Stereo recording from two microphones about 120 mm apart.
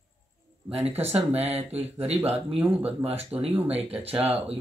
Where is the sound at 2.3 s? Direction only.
10° right (ahead or behind).